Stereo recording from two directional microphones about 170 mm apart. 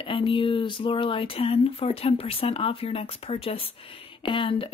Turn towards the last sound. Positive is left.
turn(degrees=30)  # may be behind; listen again after turning